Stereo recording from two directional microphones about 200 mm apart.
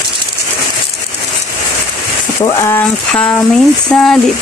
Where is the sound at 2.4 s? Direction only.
15° left (ahead or behind).